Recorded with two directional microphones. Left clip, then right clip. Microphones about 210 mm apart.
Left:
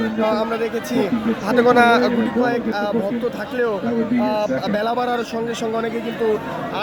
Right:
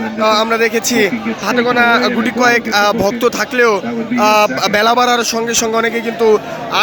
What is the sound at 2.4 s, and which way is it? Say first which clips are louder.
Speech: right 12 dB; 10° right (ahead or behind).